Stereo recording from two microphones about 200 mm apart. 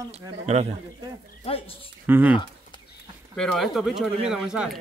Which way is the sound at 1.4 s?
30° left (ahead or behind).